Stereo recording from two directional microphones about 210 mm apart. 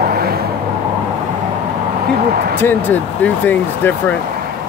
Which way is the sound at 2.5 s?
10° left (ahead or behind).